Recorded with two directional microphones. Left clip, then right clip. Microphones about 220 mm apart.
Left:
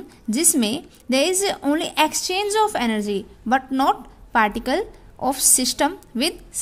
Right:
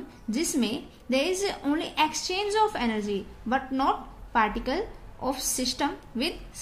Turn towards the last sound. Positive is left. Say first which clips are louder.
# left 7 dB
turn(degrees=55)  # may be behind; listen again after turning